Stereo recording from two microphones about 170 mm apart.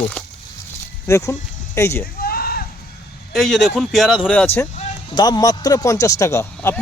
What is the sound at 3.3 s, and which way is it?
Speech, centre (ahead or behind).